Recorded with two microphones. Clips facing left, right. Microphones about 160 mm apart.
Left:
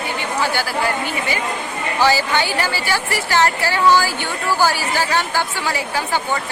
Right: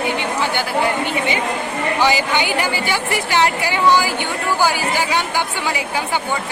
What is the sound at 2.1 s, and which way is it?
A woman's voice, 15° right (ahead or behind).